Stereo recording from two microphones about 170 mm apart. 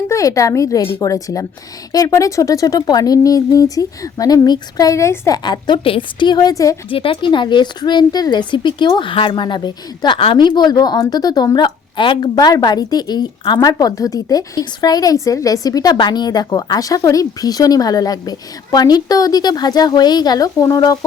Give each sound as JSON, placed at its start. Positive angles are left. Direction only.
{"t": 0.1, "sound": "a woman's voice", "side_deg": 20}
{"t": 6.9, "sound": "a woman's voice", "side_deg": 30}